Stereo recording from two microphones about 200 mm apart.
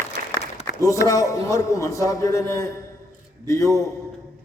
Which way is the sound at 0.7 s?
50° left (ahead or behind).